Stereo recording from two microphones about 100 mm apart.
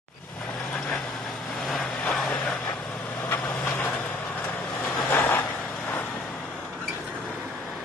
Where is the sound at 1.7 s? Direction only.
Centre (ahead or behind).